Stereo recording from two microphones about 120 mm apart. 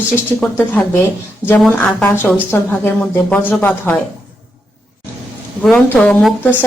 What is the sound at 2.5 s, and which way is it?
A woman's voice, 15° left (ahead or behind).